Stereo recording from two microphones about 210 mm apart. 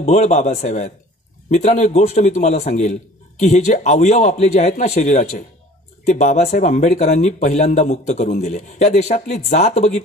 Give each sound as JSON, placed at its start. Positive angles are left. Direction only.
{"t": 0.0, "sound": "speech", "side_deg": 35}